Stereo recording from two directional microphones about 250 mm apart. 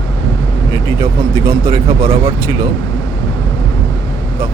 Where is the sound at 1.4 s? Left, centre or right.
Centre.